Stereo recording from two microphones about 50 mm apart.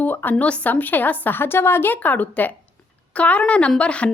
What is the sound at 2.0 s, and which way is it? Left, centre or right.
Speech, left.